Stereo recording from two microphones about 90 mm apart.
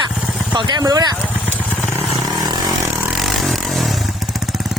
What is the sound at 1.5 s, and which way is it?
Motorcycle, 15° left (ahead or behind).